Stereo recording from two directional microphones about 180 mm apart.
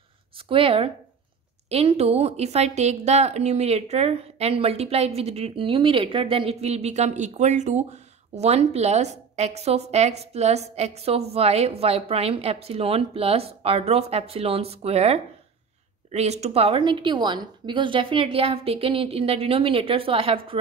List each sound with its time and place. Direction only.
0.5 s a woman's voice: 30° right (ahead or behind)